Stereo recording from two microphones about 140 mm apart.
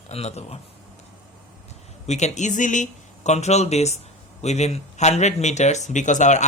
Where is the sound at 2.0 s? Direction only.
55° left (ahead or behind).